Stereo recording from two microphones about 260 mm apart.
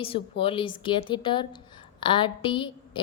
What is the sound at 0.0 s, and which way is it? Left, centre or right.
A woman's voice, left.